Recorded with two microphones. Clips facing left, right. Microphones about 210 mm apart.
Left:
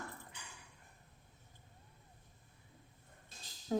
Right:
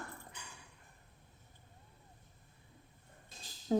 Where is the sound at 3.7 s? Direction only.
30° right (ahead or behind).